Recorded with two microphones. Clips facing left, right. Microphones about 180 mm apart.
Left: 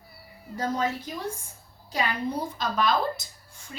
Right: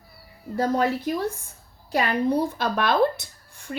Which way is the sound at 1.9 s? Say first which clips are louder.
Right 6 dB; 60° right (ahead or behind).